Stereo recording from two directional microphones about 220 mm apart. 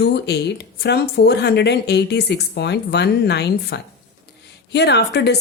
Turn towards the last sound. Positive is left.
turn(degrees=50)  # may be behind; listen again after turning